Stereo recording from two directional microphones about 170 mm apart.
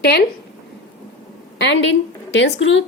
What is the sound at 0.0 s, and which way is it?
Speech, 70° left (ahead or behind).